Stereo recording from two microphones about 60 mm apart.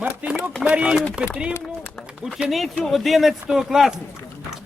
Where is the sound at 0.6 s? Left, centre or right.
Centre.